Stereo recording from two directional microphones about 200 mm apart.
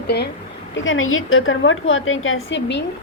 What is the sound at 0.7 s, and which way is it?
A woman's voice, 85° left.